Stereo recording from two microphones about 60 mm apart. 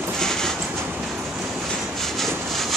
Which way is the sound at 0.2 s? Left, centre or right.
Centre.